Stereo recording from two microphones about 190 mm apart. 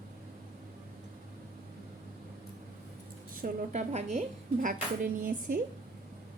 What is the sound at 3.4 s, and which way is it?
A woman's voice, 35° right (ahead or behind).